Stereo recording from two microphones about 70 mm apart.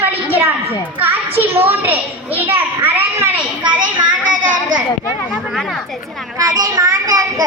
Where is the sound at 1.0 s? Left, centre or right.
Right.